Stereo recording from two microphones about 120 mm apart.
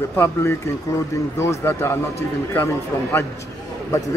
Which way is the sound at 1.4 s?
20° left (ahead or behind).